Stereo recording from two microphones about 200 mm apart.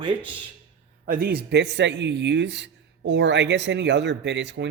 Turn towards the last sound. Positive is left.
turn(degrees=-60)  # may be behind; listen again after turning